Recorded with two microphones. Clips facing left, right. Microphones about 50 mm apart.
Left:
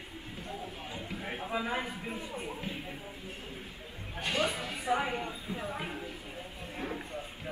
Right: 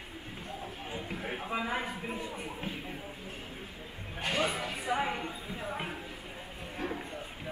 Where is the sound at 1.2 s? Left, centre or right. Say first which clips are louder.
Even; centre.